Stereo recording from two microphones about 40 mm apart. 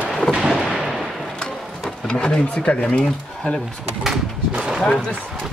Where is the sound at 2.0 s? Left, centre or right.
Left.